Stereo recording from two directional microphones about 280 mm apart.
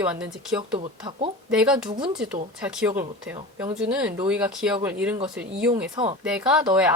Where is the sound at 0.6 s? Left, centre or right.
Centre.